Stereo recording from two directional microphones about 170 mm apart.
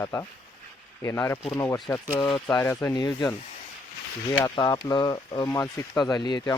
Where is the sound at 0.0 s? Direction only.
15° left (ahead or behind).